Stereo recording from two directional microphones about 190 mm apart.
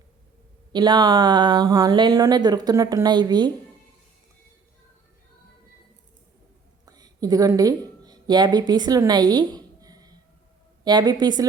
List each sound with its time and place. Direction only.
0.7 s speech: 20° right (ahead or behind)
6.8 s a sound: 20° right (ahead or behind)
10.8 s speech: 20° right (ahead or behind)